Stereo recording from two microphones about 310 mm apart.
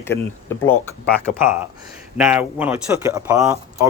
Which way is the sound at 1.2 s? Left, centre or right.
Centre.